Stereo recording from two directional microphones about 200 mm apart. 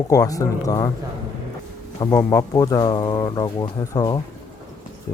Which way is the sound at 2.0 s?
20° left (ahead or behind).